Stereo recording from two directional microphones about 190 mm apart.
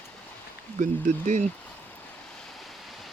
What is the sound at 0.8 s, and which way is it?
Speech, 40° right (ahead or behind).